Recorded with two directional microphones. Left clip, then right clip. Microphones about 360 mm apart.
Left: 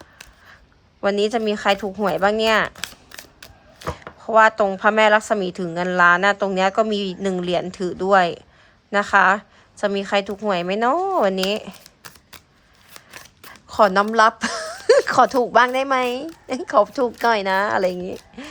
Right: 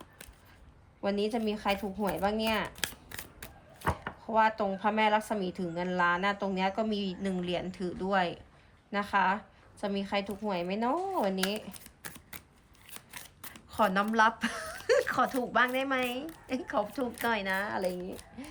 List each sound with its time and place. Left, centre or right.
1.0 s a woman's voice: centre
11.5 s shuffling cards: centre
13.7 s speech: centre